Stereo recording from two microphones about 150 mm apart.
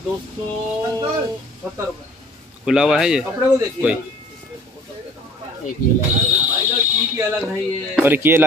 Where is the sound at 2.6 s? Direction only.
5° right (ahead or behind).